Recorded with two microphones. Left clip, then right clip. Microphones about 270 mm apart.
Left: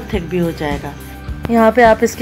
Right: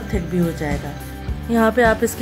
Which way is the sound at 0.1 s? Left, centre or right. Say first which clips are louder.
Left 4 dB; centre.